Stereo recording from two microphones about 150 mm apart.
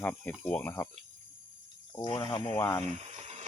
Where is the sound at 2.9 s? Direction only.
45° right (ahead or behind).